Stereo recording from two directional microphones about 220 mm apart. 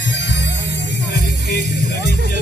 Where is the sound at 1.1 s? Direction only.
45° left (ahead or behind).